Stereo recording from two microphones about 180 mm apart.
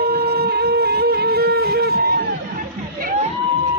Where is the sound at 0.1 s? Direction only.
60° right (ahead or behind).